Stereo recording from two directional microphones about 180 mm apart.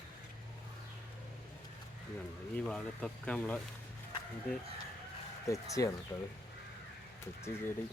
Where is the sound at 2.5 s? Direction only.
5° left (ahead or behind).